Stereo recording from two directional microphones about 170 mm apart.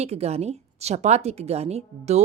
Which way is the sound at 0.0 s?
40° right (ahead or behind).